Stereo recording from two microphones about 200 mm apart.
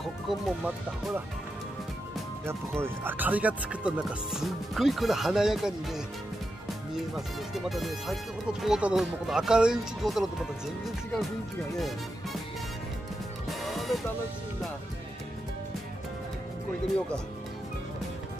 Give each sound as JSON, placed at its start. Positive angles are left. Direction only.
{"t": 0.0, "sound": "speech", "side_deg": 0}
{"t": 2.4, "sound": "speech", "side_deg": -10}
{"t": 7.2, "sound": "speech", "side_deg": 0}
{"t": 13.5, "sound": "music", "side_deg": 0}